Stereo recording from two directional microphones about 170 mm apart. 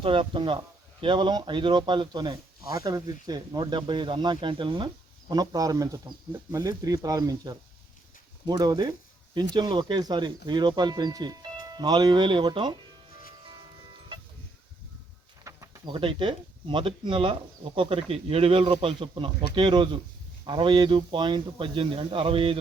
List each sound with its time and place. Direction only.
0.0 s speech: 30° right (ahead or behind)
15.4 s a sound: 15° right (ahead or behind)
15.9 s speech: 30° right (ahead or behind)